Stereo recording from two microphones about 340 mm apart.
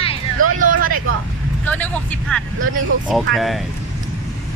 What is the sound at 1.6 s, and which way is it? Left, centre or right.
Vehicle, centre.